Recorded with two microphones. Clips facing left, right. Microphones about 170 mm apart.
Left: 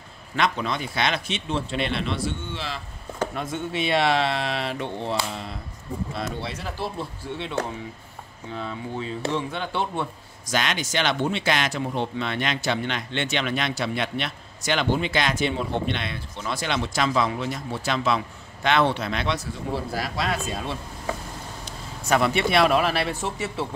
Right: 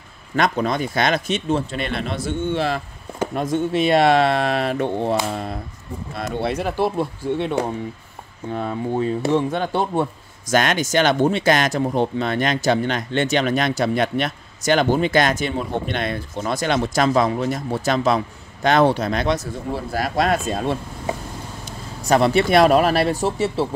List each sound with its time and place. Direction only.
0.4 s speech: 45° right (ahead or behind)
3.3 s speech: 40° right (ahead or behind)
22.0 s speech: 35° right (ahead or behind)